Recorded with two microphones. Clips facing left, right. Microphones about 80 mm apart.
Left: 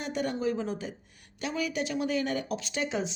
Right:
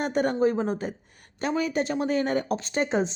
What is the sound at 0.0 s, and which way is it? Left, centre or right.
Speech, right.